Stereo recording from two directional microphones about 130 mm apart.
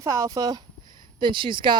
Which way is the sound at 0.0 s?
25° right (ahead or behind).